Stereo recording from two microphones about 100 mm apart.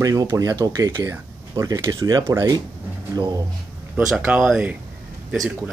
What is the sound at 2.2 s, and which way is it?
Speech, 30° right (ahead or behind).